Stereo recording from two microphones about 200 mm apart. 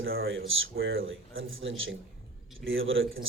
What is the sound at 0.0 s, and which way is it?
A man's voice, 80° right.